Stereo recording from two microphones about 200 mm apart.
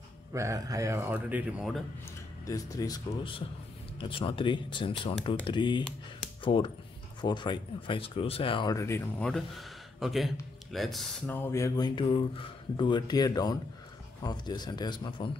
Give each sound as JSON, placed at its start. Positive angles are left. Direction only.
{"t": 0.3, "sound": "speech", "side_deg": -15}
{"t": 2.0, "sound": "speech", "side_deg": 15}
{"t": 9.3, "sound": "speech", "side_deg": 0}